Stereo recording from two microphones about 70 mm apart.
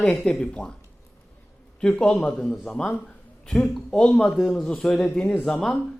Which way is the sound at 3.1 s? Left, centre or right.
Centre.